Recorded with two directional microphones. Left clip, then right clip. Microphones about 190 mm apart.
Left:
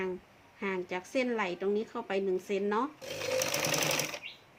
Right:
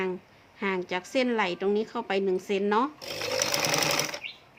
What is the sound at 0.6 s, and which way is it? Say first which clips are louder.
A woman's voice: right 5 dB; 20° right (ahead or behind).